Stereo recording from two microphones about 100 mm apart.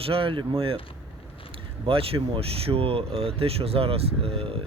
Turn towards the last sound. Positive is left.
turn(degrees=-75)  # may be behind; listen again after turning